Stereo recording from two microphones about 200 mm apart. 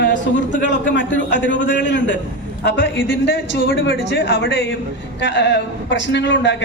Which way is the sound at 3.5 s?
55° left (ahead or behind).